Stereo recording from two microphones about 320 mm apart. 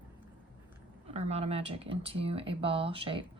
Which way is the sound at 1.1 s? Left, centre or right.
Centre.